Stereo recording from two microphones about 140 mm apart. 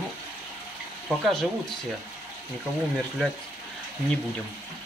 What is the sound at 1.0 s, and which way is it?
Speech, centre (ahead or behind).